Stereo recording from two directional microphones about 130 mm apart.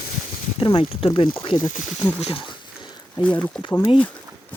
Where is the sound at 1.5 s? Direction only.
80° left.